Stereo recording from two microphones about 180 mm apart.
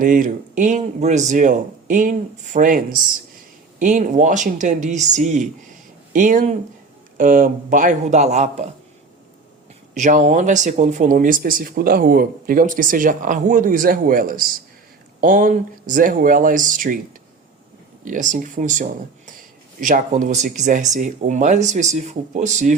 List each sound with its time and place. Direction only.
0.0 s speech: 50° right (ahead or behind)
9.9 s speech: 45° right (ahead or behind)
18.0 s speech: 45° right (ahead or behind)